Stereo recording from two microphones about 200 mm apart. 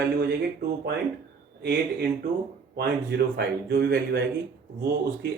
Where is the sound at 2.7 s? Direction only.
55° right (ahead or behind).